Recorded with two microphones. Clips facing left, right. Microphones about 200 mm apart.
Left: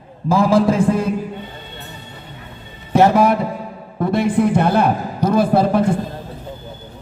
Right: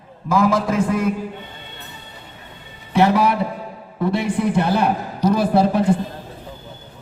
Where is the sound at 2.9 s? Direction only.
45° left (ahead or behind).